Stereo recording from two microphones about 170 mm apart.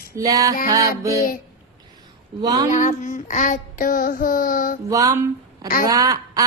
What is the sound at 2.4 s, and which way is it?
Speech, 20° right (ahead or behind).